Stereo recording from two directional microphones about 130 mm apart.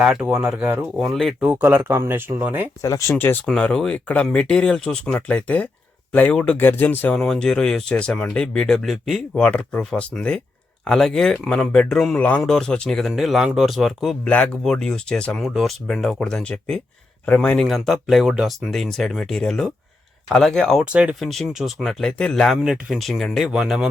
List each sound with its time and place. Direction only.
0.0 s speech: 10° right (ahead or behind)
0.9 s speech: centre (ahead or behind)
1.5 s speech: 15° right (ahead or behind)
2.8 s speech: 25° left (ahead or behind)
3.4 s speech: 5° left (ahead or behind)
20.9 s speech: 10° right (ahead or behind)